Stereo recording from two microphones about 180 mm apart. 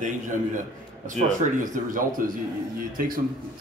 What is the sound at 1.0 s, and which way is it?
Speech, 45° right (ahead or behind).